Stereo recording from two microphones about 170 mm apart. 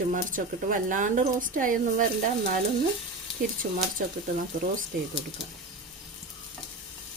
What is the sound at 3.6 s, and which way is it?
Frying, 60° right (ahead or behind).